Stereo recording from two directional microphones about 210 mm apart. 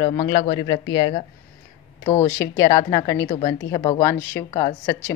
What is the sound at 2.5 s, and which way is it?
A woman's voice, 15° left (ahead or behind).